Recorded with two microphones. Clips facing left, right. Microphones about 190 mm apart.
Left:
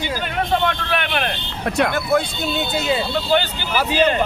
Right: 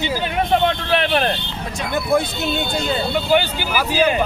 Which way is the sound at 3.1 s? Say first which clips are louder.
Right 2 dB; 10° right (ahead or behind).